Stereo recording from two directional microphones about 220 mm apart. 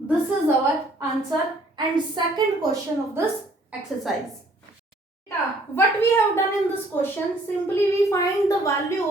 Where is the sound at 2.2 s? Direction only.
20° right (ahead or behind).